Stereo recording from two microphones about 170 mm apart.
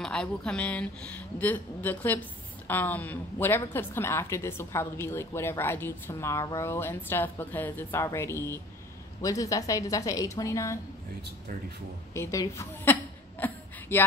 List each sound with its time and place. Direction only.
0.0 s a woman's voice: 5° left (ahead or behind)
12.1 s a woman's voice: 15° left (ahead or behind)
13.4 s a sound: 10° left (ahead or behind)